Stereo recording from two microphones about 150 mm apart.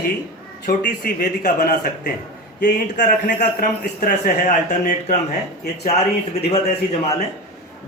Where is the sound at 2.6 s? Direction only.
60° left (ahead or behind).